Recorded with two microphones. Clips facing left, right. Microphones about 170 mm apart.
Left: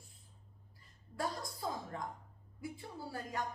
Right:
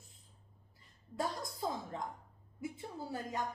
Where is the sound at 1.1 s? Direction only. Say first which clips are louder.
Right 1 dB; 20° right (ahead or behind).